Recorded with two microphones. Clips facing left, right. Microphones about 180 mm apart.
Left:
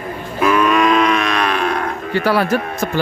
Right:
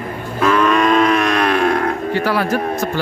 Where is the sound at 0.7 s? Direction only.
35° right (ahead or behind); by 1.7 s 55° right (ahead or behind).